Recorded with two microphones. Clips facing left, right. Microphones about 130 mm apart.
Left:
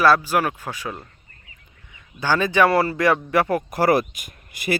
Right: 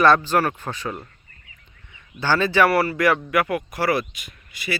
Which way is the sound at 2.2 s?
15° left (ahead or behind).